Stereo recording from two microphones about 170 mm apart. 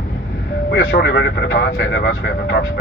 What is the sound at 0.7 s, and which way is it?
Speech, 90° left.